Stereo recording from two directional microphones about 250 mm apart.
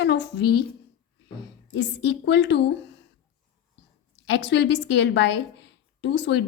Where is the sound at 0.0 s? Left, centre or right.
Left.